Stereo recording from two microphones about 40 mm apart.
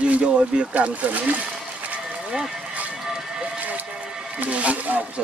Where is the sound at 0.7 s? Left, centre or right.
Right.